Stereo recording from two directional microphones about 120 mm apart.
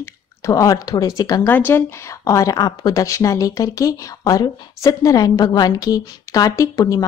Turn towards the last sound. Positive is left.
turn(degrees=30)  # may be behind; listen again after turning